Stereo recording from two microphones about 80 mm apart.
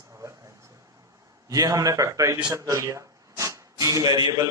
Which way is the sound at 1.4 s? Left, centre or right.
Right.